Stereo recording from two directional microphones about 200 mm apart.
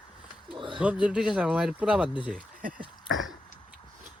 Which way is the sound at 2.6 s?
45° right (ahead or behind).